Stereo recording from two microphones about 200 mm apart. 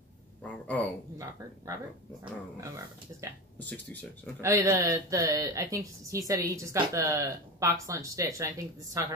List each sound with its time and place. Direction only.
0.4 s speech: 5° left (ahead or behind)
2.6 s speech: 15° right (ahead or behind)
3.5 s speech: 10° left (ahead or behind)
4.4 s speech: 15° right (ahead or behind)